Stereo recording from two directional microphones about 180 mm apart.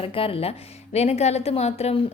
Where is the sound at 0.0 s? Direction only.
30° left (ahead or behind).